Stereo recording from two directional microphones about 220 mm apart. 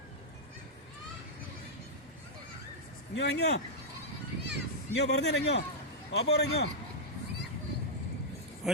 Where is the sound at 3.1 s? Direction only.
50° left (ahead or behind).